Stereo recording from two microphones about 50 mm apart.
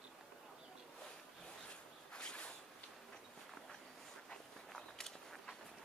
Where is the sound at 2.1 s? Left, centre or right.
Centre.